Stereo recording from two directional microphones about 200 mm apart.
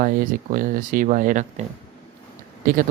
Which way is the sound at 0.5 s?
45° right (ahead or behind).